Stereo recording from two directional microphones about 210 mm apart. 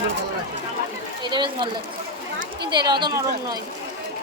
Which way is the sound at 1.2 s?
20° right (ahead or behind).